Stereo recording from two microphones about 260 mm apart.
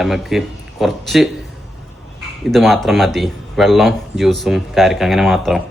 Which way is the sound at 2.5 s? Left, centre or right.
Centre.